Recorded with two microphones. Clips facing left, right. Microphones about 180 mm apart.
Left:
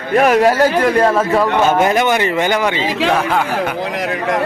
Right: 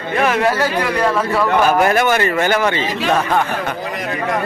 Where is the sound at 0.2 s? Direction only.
40° left (ahead or behind).